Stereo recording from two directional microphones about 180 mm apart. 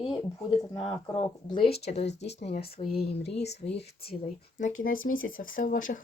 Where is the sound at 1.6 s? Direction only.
60° left (ahead or behind).